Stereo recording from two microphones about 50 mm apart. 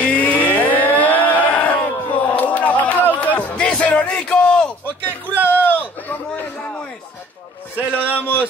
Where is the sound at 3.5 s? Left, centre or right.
Left.